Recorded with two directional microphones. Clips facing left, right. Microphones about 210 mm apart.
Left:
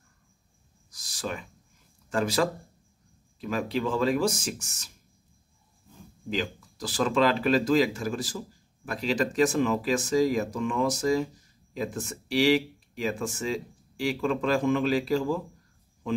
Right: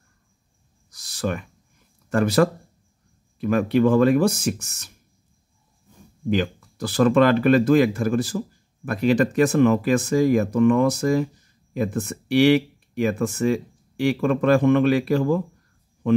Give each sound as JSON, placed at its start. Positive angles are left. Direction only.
{"t": 1.0, "sound": "a sound", "side_deg": -60}
{"t": 2.0, "sound": "speech", "side_deg": -60}
{"t": 6.3, "sound": "speech", "side_deg": -55}